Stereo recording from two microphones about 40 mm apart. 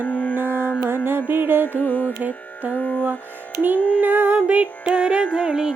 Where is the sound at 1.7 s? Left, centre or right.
Left.